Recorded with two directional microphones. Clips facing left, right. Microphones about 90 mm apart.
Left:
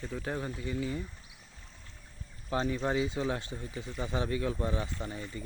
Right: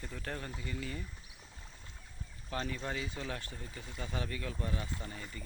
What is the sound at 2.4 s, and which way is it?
Speech, 20° left (ahead or behind).